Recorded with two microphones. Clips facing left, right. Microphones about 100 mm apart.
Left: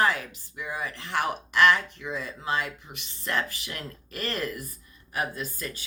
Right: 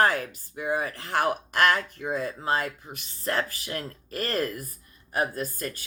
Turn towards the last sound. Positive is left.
turn(degrees=-45)  # may be behind; listen again after turning